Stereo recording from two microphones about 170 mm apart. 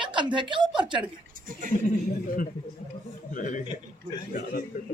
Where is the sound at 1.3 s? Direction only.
55° right (ahead or behind).